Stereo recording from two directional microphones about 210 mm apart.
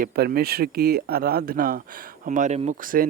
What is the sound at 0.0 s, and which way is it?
Speech, 45° right (ahead or behind).